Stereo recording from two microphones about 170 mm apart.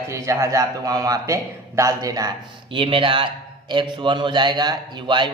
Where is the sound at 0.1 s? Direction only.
15° right (ahead or behind).